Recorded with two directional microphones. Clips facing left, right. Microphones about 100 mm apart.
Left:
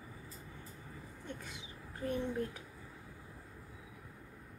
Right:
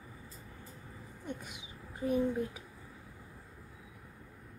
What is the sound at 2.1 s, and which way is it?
Speech, 5° right (ahead or behind).